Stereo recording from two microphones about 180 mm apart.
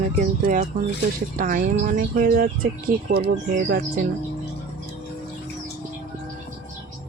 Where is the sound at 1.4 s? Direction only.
50° right (ahead or behind).